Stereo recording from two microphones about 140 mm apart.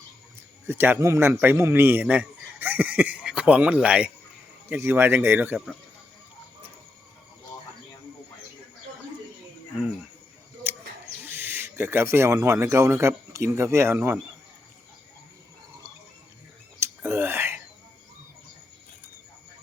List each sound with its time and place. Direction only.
0.7 s speech: 15° right (ahead or behind)
10.6 s mouse: 15° right (ahead or behind)
11.2 s speech: 15° right (ahead or behind)
16.8 s whispering: 15° right (ahead or behind)